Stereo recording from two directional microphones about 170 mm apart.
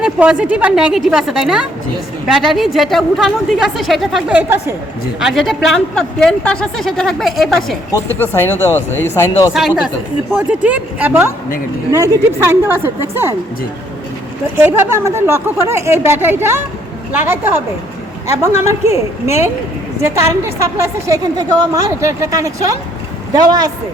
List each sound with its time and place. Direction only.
0.0 s speech: 5° right (ahead or behind)
5.2 s speech: centre (ahead or behind)
8.2 s speech: 10° left (ahead or behind)
9.5 s speech: centre (ahead or behind)
14.6 s speech: 15° right (ahead or behind)
18.6 s speech: 15° right (ahead or behind)